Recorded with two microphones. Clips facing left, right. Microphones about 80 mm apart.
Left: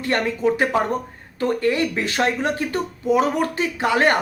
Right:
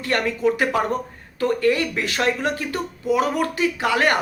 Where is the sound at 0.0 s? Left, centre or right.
Left.